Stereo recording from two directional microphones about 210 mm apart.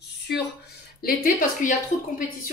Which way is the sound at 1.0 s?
40° left (ahead or behind).